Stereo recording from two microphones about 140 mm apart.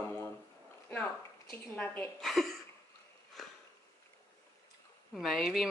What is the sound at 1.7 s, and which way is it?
Speech, 10° left (ahead or behind).